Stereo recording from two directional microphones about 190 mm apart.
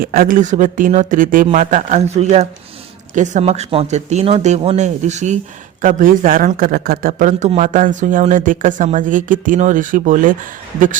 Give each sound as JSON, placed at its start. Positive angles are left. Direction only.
{"t": 0.0, "sound": "speech", "side_deg": -50}